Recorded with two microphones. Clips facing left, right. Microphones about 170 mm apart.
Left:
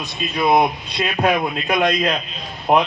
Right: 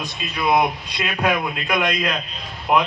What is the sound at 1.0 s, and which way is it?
A man's voice, 35° left (ahead or behind).